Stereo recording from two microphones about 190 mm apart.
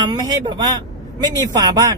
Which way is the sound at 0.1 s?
25° right (ahead or behind).